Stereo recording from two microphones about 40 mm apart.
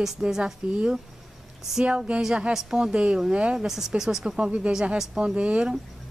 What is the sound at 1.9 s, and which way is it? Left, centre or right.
A woman's voice, right.